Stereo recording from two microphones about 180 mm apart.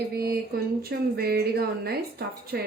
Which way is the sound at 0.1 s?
60° right (ahead or behind).